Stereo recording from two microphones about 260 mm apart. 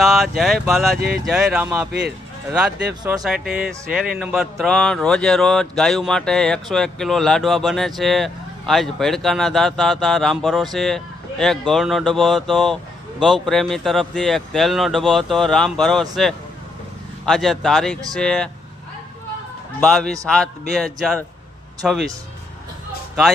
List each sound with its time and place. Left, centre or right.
0.0 s speech: centre
1.9 s speech: right
2.5 s speech: centre
19.8 s speech: centre